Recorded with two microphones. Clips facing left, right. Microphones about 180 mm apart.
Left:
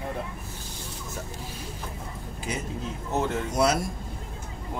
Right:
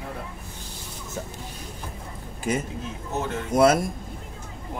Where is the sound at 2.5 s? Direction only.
50° right (ahead or behind).